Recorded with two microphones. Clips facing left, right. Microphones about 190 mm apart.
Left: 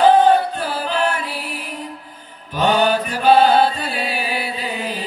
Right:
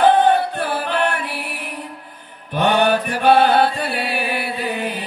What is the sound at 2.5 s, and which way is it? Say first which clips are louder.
Chant: even; 60° right (ahead or behind).